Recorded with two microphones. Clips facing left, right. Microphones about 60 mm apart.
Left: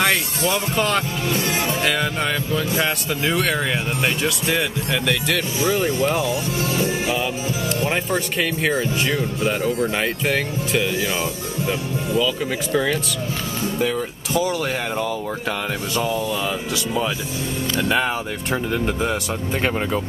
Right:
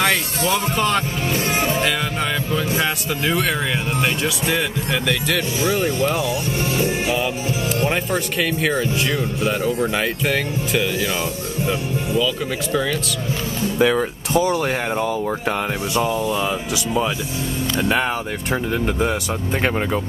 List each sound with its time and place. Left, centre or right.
0.5 s speech: centre
1.3 s music: right
2.8 s speech: centre
6.6 s speech: right
7.9 s speech: centre
12.7 s speech: centre
13.9 s speech: right
15.0 s speech: centre
17.9 s speech: centre